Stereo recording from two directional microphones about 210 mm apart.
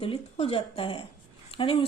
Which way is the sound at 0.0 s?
25° left (ahead or behind).